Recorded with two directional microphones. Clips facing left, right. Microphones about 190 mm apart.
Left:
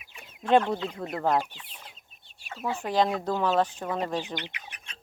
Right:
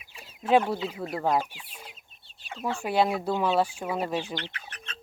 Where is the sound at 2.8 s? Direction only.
10° right (ahead or behind).